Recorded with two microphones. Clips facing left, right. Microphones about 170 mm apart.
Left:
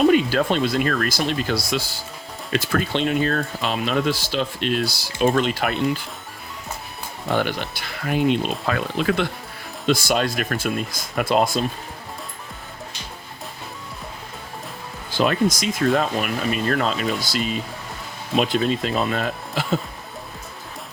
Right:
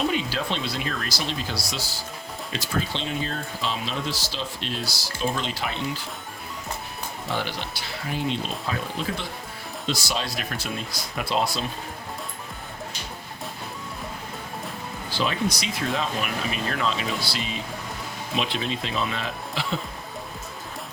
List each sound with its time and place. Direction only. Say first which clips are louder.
0.1 s speech: left 9 dB; 50° left (ahead or behind)
7.3 s speech: left 8 dB; 55° left (ahead or behind); by 9.2 s 75° left (ahead or behind)
9.8 s speech: left 9 dB; 55° left (ahead or behind)
15.1 s speech: left 7 dB; 50° left (ahead or behind)